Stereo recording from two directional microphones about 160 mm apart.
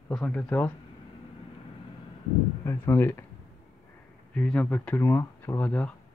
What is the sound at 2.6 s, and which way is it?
Speech, 15° left (ahead or behind).